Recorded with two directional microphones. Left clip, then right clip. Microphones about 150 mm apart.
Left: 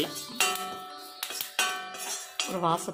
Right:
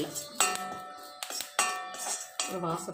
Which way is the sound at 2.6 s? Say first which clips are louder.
Left 10 dB; 45° left (ahead or behind).